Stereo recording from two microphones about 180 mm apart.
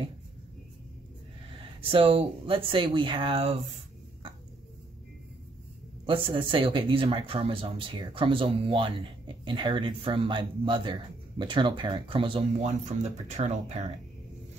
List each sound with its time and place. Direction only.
1.6 s speech: 30° right (ahead or behind)
6.0 s speech: 30° right (ahead or behind)